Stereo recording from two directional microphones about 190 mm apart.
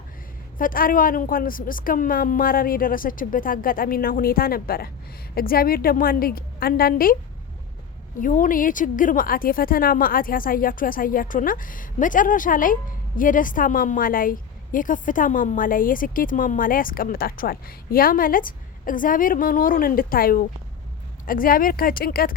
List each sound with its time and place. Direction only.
0.6 s a woman's voice: 45° left (ahead or behind)
8.2 s a woman's voice: 45° left (ahead or behind)